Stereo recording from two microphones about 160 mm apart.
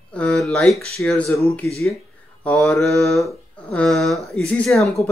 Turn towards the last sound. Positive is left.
turn(degrees=0)  # may be behind; listen again after turning